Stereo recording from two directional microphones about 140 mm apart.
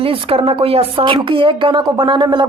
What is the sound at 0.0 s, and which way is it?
A woman's voice, 40° right (ahead or behind).